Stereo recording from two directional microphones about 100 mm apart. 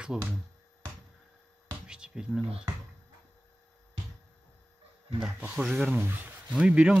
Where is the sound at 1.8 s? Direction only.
10° right (ahead or behind).